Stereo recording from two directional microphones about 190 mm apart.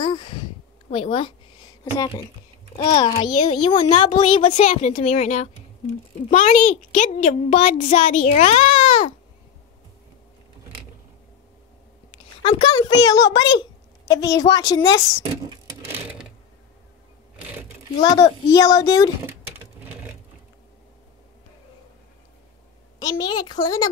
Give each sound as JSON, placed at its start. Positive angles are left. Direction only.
{"t": 0.0, "sound": "a sound", "side_deg": 25}
{"t": 0.8, "sound": "a woman's voice", "side_deg": 30}
{"t": 2.7, "sound": "a child's voice", "side_deg": 30}
{"t": 12.4, "sound": "a child's voice", "side_deg": 30}
{"t": 15.6, "sound": "sewing machine", "side_deg": -10}
{"t": 18.0, "sound": "a child's voice", "side_deg": 20}
{"t": 23.0, "sound": "a child's voice", "side_deg": 20}